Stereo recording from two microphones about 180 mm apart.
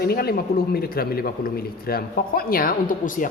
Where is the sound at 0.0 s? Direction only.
60° left (ahead or behind).